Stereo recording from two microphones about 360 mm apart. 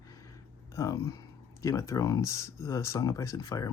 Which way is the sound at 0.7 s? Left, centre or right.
Centre.